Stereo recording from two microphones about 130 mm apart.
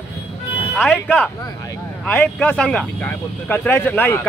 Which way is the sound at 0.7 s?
10° left (ahead or behind).